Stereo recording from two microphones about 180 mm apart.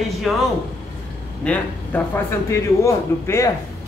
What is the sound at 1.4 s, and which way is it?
A man's voice, 5° left (ahead or behind).